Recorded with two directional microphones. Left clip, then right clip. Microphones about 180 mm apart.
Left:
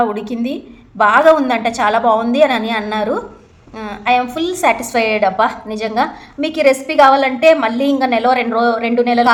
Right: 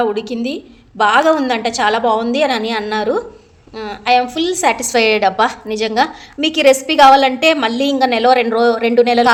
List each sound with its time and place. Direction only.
0.0 s a woman's voice: 40° right (ahead or behind)